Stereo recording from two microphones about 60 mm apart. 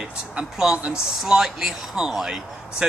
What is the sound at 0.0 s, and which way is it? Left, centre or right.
Speech, centre.